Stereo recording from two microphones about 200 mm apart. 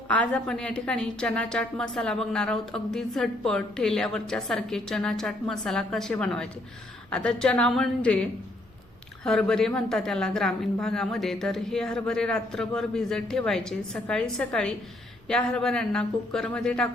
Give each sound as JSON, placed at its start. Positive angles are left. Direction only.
{"t": 0.1, "sound": "a woman's voice", "side_deg": 5}
{"t": 9.2, "sound": "a woman's voice", "side_deg": 5}